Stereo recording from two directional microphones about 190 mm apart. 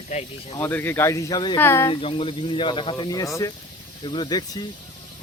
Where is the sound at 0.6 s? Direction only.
10° left (ahead or behind).